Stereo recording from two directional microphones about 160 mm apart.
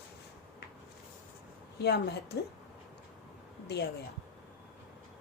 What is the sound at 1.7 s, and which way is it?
Speech, 90° left.